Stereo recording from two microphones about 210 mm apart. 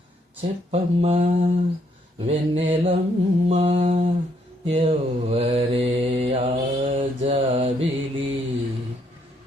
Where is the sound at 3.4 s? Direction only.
25° right (ahead or behind).